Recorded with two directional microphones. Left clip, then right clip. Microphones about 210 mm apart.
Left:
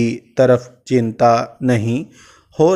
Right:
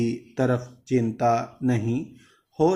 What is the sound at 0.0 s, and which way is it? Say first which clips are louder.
Speech: left 11 dB; 45° left (ahead or behind).